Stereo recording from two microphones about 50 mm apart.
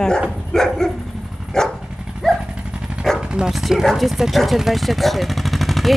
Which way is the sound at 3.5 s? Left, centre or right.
Centre.